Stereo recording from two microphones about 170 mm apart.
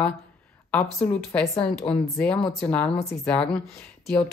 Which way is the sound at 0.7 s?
5° left (ahead or behind).